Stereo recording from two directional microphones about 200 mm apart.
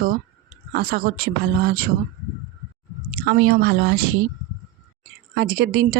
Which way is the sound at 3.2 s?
60° right (ahead or behind).